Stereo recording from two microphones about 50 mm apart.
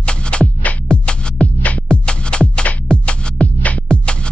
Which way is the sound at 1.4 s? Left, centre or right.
Left.